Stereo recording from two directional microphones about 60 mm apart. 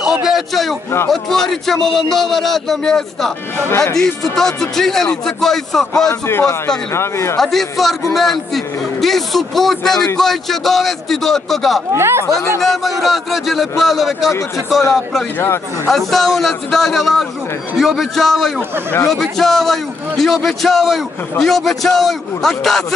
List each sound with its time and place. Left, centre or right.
0.0 s a sound: centre
1.1 s a man's voice: centre
6.9 s speech: left
7.3 s a man's voice: centre
11.9 s speech: right
12.6 s a man's voice: centre
15.9 s a man's voice: centre